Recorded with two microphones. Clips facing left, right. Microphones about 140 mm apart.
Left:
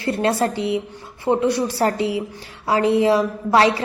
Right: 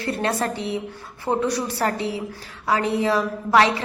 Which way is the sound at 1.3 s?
25° left (ahead or behind).